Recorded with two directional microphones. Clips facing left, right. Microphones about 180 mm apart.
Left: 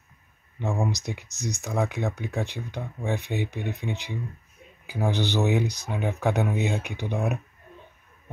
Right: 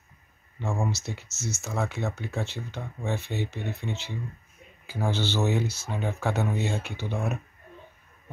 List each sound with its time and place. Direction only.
0.6 s speech: 15° left (ahead or behind)